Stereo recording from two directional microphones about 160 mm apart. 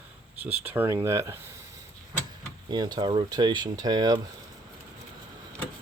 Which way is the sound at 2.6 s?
25° right (ahead or behind).